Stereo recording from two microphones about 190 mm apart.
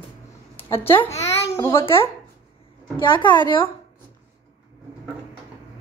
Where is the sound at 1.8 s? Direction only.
30° left (ahead or behind).